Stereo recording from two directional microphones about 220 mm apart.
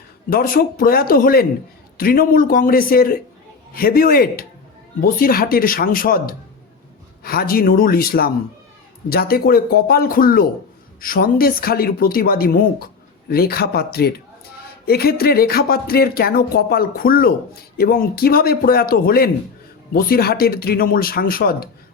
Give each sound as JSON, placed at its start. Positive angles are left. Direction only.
{"t": 0.3, "sound": "speech", "side_deg": 40}